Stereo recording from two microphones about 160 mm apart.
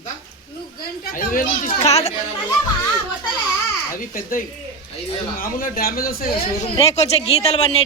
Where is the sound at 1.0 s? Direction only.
65° left (ahead or behind).